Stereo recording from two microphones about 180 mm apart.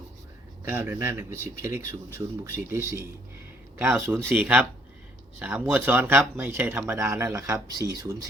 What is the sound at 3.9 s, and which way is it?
Speech, 10° right (ahead or behind).